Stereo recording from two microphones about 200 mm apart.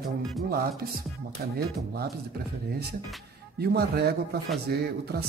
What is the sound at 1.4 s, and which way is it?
Speech, 45° right (ahead or behind).